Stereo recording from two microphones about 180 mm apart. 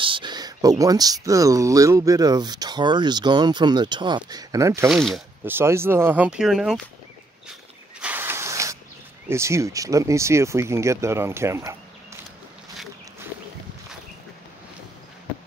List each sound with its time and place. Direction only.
0.0 s speech: 25° right (ahead or behind)
4.8 s speech: centre (ahead or behind)
5.4 s speech: 10° right (ahead or behind)
8.0 s a sound: 10° right (ahead or behind)
9.3 s speech: 15° right (ahead or behind)